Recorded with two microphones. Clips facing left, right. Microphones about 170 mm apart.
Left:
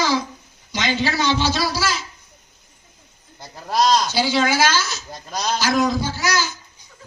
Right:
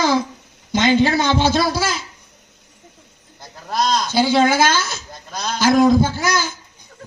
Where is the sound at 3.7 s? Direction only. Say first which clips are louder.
Even; 55° right (ahead or behind).